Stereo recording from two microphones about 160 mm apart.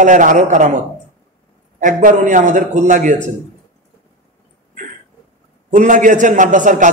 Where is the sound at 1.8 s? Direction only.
55° right (ahead or behind).